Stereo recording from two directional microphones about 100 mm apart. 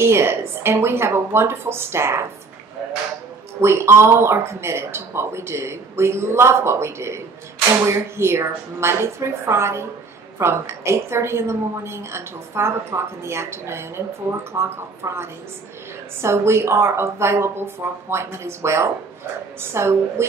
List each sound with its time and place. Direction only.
0.0 s a woman's voice: 25° right (ahead or behind)
3.6 s a woman's voice: 25° right (ahead or behind)